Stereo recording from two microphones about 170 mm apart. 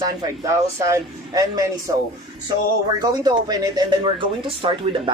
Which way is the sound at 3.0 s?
25° right (ahead or behind).